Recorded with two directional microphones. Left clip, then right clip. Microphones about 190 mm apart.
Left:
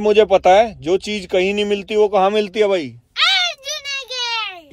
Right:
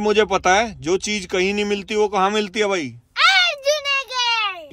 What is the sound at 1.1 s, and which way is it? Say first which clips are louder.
Speech: left 3 dB; 25° left (ahead or behind).